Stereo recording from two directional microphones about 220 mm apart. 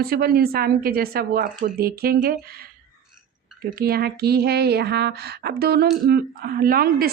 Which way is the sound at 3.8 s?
45° right (ahead or behind).